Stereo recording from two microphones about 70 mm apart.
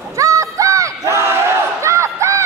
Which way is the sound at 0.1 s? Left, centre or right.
Right.